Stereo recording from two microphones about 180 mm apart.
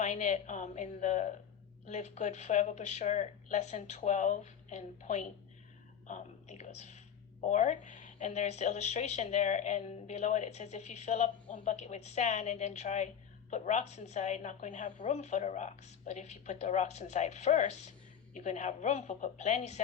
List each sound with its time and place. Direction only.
0.0 s speech: 40° left (ahead or behind)